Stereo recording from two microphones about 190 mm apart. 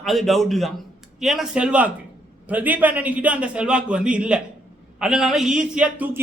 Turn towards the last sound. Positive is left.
turn(degrees=-10)  # may be behind; listen again after turning